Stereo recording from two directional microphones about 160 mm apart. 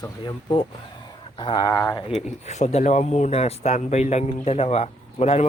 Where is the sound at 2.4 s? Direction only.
45° left (ahead or behind).